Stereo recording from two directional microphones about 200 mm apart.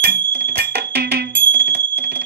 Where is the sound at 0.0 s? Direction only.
50° right (ahead or behind).